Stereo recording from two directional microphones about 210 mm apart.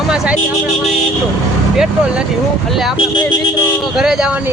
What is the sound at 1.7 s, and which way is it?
Speech, 5° right (ahead or behind).